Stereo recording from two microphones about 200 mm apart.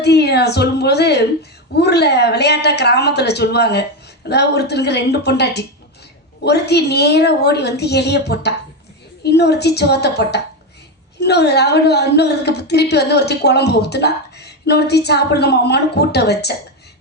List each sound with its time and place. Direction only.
0.0 s a woman's voice: 55° left (ahead or behind)